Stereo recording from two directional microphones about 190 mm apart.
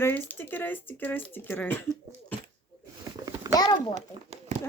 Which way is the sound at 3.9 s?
35° right (ahead or behind).